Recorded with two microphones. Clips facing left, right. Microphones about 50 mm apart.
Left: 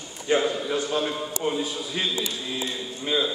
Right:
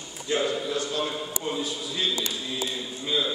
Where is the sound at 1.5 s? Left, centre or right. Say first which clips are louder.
Left 3 dB; left.